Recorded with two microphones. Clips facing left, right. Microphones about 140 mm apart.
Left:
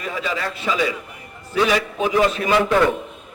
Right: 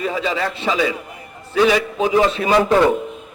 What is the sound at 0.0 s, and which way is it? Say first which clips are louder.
A man's voice: right 4 dB; 30° right (ahead or behind).